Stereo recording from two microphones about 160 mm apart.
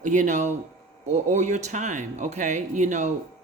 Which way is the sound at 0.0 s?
50° right (ahead or behind).